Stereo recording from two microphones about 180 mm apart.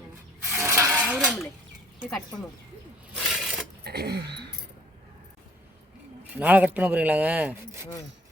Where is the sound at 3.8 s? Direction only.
65° right (ahead or behind).